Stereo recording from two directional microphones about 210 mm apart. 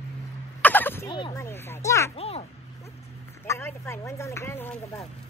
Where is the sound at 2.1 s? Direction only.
30° left (ahead or behind).